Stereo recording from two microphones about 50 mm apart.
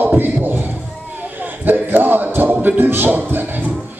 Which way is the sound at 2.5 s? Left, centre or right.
Right.